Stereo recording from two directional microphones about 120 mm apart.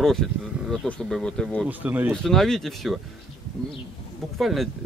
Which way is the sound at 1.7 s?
15° right (ahead or behind).